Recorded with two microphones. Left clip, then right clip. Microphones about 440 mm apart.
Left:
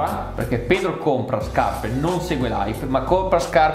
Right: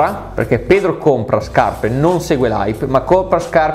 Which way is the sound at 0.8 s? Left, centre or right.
Right.